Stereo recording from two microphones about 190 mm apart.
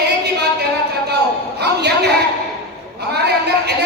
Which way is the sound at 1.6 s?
60° right (ahead or behind).